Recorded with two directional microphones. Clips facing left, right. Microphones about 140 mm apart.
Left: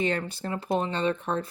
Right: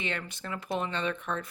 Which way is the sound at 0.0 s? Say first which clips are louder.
Left 8 dB; 40° left (ahead or behind).